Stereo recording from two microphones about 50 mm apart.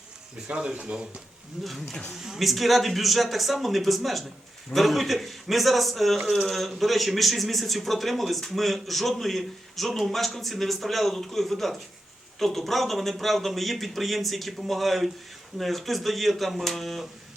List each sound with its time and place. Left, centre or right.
0.4 s speech: right
1.6 s a man's voice: centre